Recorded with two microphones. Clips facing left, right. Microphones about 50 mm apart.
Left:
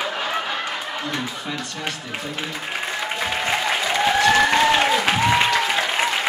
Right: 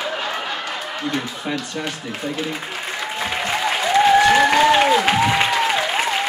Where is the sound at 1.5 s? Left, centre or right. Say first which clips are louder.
Right 4 dB; right.